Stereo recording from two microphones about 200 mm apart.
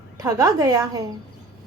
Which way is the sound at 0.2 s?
15° right (ahead or behind).